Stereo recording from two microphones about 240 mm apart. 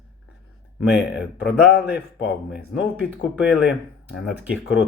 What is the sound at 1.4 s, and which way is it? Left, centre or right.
Speech, left.